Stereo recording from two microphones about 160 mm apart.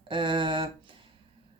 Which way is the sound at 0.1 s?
30° right (ahead or behind).